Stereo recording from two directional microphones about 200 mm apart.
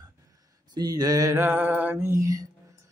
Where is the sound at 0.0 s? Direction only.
20° right (ahead or behind).